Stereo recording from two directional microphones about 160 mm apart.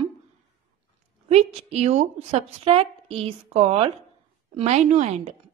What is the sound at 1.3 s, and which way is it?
A woman's voice, 45° right (ahead or behind).